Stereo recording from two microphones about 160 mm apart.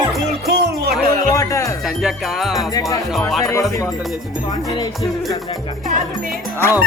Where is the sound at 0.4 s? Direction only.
90° right.